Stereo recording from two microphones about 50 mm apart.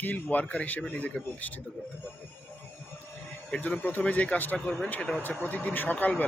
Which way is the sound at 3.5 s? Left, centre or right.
Left.